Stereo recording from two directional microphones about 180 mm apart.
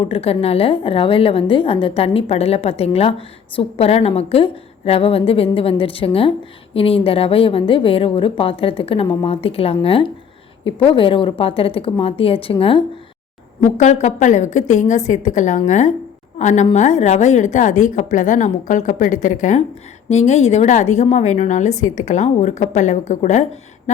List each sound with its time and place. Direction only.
0.0 s a woman's voice: 35° left (ahead or behind)
13.6 s a woman's voice: 40° left (ahead or behind)